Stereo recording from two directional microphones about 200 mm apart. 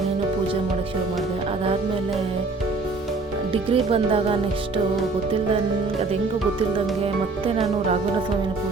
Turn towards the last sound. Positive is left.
turn(degrees=-30)  # may be behind; listen again after turning